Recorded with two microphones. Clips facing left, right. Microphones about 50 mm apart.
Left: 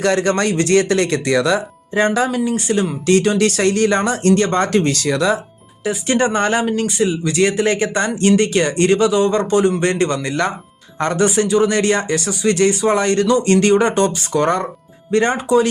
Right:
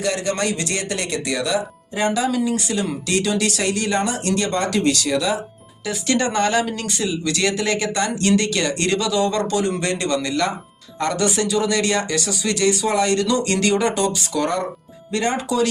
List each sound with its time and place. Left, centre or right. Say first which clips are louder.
0.0 s speech: left 6 dB; left
1.9 s speech: left 4 dB; left
5.8 s speech: left 4 dB; left